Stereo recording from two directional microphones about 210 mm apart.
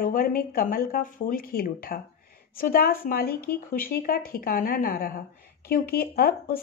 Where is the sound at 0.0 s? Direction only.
45° left (ahead or behind).